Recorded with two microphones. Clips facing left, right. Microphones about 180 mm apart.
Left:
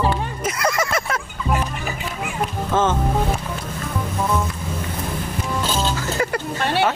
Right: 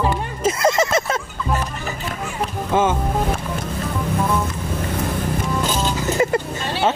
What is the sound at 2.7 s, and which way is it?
Speech, 10° right (ahead or behind).